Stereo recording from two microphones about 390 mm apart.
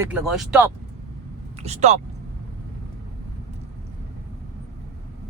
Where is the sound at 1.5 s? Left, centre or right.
Centre.